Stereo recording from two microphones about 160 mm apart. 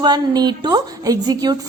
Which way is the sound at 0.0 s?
25° right (ahead or behind).